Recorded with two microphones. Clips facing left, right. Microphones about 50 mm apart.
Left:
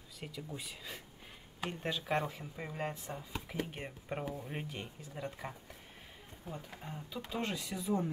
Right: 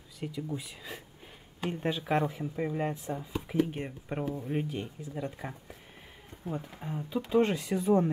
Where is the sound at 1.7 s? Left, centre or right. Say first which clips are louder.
Right 6 dB; centre.